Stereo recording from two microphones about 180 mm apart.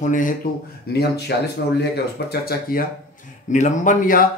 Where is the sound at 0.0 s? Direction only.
45° left (ahead or behind).